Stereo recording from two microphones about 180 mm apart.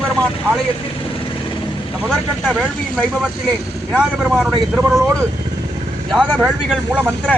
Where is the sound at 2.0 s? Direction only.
Centre (ahead or behind).